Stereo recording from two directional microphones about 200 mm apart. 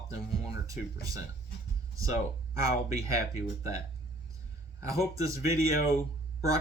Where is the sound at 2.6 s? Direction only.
15° right (ahead or behind).